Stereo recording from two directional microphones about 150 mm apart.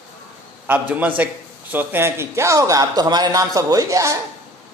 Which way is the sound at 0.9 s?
10° right (ahead or behind).